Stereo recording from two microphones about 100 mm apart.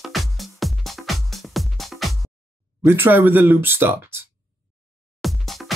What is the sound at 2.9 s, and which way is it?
Speech, 20° right (ahead or behind).